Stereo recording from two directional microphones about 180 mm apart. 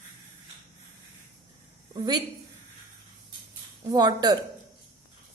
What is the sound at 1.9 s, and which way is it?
Speech, 25° right (ahead or behind).